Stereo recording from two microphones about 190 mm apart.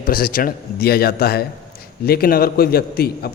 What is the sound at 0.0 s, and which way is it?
A man's voice, 50° left (ahead or behind).